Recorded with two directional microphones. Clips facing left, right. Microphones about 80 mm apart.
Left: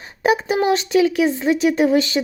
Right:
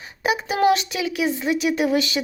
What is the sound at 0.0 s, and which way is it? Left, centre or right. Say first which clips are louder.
Speech: left 5 dB; left.